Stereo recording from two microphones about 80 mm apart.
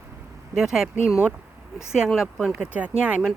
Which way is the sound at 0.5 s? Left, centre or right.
Centre.